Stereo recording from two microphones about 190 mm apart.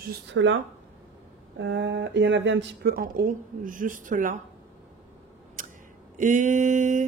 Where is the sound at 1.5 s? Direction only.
70° right (ahead or behind).